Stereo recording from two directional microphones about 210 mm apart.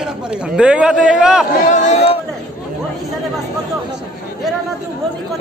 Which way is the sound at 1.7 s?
35° left (ahead or behind).